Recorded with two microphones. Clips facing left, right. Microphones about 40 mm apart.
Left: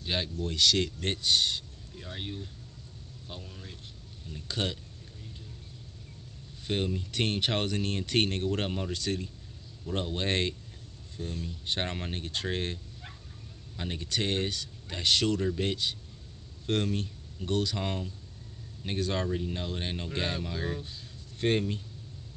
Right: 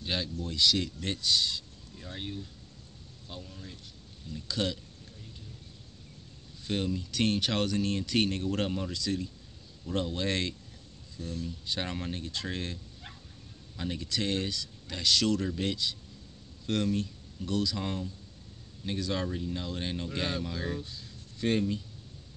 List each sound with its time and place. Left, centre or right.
0.4 s speech: left
1.1 s speech: left
2.0 s speech: centre
4.3 s speech: left
6.6 s speech: left
8.9 s speech: left
9.9 s speech: left
19.7 s speech: left
20.3 s speech: centre
20.8 s speech: left